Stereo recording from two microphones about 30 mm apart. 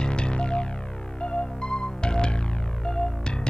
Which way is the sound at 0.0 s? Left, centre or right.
Left.